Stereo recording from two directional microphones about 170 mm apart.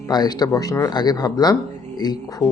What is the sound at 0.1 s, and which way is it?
Speech, 25° left (ahead or behind).